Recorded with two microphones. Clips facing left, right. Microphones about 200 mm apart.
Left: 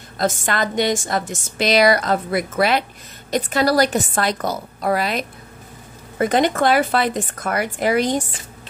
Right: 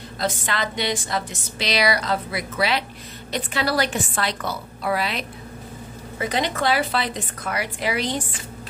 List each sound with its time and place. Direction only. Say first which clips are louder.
0.2 s a woman's voice: left 5 dB; 50° left (ahead or behind)